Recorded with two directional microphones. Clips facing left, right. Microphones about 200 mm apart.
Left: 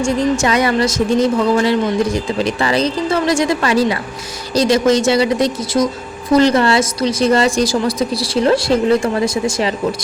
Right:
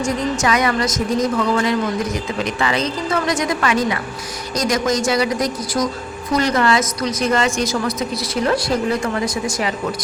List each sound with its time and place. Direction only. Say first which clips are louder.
0.0 s a woman's voice: left 4 dB; 30° left (ahead or behind)